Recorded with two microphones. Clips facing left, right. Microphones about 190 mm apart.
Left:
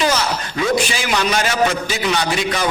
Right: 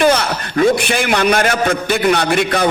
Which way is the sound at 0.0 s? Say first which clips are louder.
Right 5 dB; 60° right (ahead or behind).